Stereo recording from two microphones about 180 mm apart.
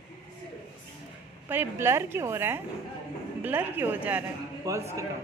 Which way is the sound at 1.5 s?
15° right (ahead or behind).